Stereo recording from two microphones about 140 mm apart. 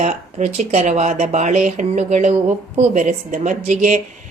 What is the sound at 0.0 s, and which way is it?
A woman's voice, 60° right (ahead or behind).